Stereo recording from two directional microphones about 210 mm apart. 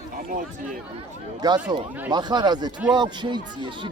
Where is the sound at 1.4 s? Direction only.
20° right (ahead or behind).